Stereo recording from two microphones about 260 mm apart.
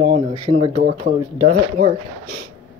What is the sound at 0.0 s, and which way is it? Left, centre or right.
Speech, centre.